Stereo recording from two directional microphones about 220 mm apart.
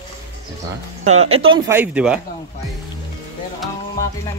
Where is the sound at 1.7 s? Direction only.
5° right (ahead or behind).